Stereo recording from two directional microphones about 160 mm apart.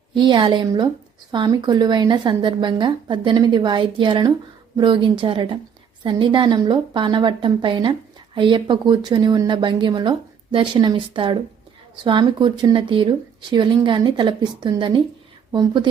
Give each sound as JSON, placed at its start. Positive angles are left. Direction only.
{"t": 0.1, "sound": "a woman's voice", "side_deg": -30}